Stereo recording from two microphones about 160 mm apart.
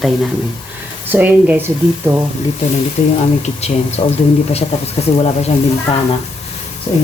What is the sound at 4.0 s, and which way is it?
Speech, 30° left (ahead or behind).